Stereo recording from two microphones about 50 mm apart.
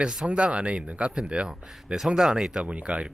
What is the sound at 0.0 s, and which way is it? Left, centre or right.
Speech, centre.